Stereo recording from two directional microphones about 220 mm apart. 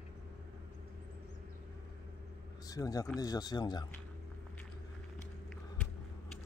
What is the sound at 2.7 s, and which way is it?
Speech, 15° left (ahead or behind).